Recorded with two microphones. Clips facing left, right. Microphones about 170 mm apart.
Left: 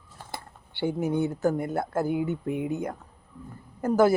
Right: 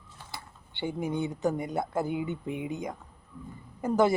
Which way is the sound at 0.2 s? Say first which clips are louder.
Left 6 dB; 50° left (ahead or behind).